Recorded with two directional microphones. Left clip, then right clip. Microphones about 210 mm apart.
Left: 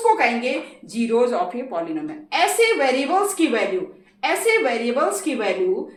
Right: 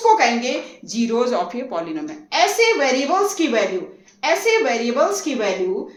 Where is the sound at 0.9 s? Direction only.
25° right (ahead or behind).